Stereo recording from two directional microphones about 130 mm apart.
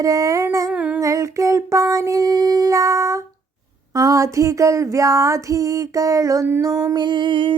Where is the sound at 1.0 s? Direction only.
25° right (ahead or behind).